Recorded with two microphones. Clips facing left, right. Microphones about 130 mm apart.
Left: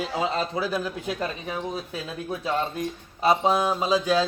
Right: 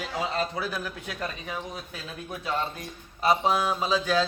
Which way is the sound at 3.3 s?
25° left (ahead or behind).